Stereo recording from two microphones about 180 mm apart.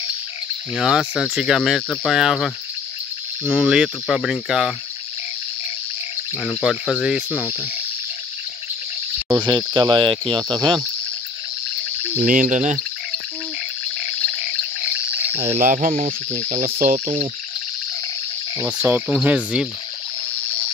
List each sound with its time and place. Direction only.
0.7 s speech: 5° right (ahead or behind)
6.4 s speech: centre (ahead or behind)
9.5 s speech: 25° right (ahead or behind)
12.3 s speech: 45° right (ahead or behind)
15.3 s speech: 35° right (ahead or behind)
16.6 s speech: 50° right (ahead or behind)
18.8 s speech: 5° right (ahead or behind)